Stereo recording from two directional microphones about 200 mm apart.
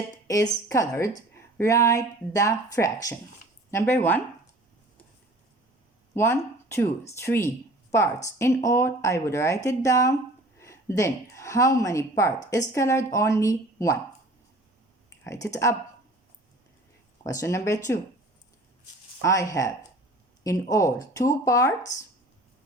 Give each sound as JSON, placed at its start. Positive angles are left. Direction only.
{"t": 0.7, "sound": "speech", "side_deg": 15}
{"t": 6.1, "sound": "a woman's voice", "side_deg": 10}
{"t": 15.2, "sound": "speech", "side_deg": 15}
{"t": 17.2, "sound": "speech", "side_deg": 15}
{"t": 19.2, "sound": "speech", "side_deg": 15}